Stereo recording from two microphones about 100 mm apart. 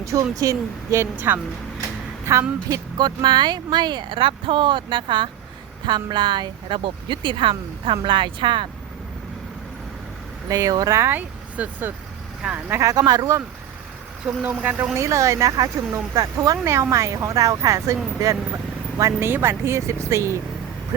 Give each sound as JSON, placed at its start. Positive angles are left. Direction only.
{"t": 0.0, "sound": "a woman's voice", "side_deg": -30}
{"t": 2.6, "sound": "speech", "side_deg": -40}
{"t": 10.5, "sound": "speech", "side_deg": -40}
{"t": 11.0, "sound": "speech", "side_deg": -20}
{"t": 12.9, "sound": "speech", "side_deg": -40}
{"t": 14.3, "sound": "speech", "side_deg": -20}
{"t": 14.9, "sound": "speech", "side_deg": -30}
{"t": 18.9, "sound": "speech", "side_deg": -35}